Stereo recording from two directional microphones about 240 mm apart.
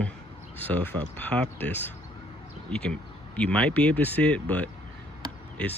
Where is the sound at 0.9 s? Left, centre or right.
Centre.